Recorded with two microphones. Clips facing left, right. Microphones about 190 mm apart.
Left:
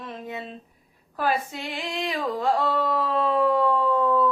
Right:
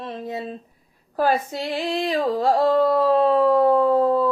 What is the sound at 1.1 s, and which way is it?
Female singing, 40° right (ahead or behind).